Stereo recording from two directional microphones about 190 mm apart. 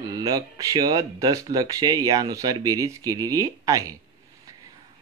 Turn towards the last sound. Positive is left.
turn(degrees=-20)  # may be behind; listen again after turning